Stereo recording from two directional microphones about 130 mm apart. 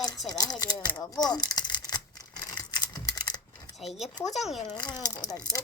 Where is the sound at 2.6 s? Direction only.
35° left (ahead or behind).